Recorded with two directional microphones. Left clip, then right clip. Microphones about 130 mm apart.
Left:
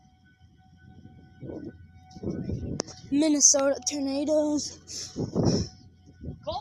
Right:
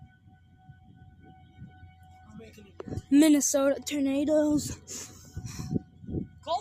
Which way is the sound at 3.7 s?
30° right (ahead or behind).